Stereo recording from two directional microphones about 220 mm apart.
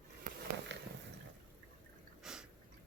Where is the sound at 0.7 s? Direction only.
55° right (ahead or behind).